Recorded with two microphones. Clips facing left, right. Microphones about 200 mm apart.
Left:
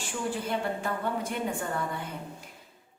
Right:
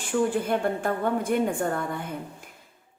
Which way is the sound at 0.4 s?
50° right (ahead or behind).